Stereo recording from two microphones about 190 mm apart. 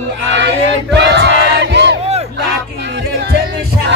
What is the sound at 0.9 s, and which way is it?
Battle cry, 65° right (ahead or behind).